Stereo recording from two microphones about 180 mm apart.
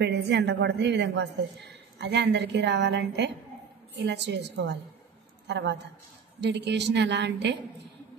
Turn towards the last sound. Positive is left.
turn(degrees=-70)  # may be behind; listen again after turning